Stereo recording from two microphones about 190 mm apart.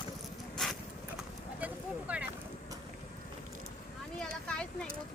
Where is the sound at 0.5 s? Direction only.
Centre (ahead or behind).